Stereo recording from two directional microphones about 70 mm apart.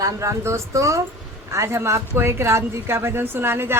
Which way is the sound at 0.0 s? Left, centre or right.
Right.